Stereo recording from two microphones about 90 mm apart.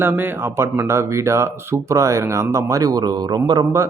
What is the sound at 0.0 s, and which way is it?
Speech, 25° right (ahead or behind).